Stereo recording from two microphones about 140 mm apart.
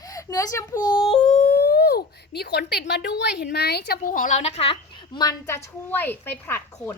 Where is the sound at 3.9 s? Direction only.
90° left.